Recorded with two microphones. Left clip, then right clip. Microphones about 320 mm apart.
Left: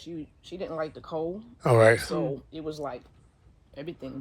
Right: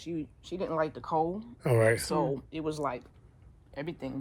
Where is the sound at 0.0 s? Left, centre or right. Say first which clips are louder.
Right 2 dB; right.